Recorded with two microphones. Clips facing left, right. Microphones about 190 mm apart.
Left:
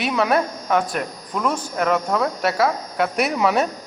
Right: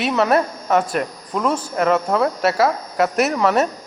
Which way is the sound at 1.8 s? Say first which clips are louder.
Right 3 dB; 5° right (ahead or behind).